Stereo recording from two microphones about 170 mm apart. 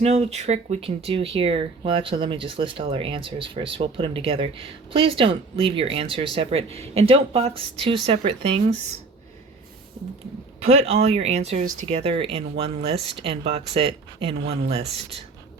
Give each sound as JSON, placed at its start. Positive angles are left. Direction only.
{"t": 0.0, "sound": "speech", "side_deg": -40}
{"t": 10.6, "sound": "speech", "side_deg": -35}